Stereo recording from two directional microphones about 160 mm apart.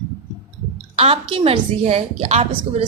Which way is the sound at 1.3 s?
35° right (ahead or behind).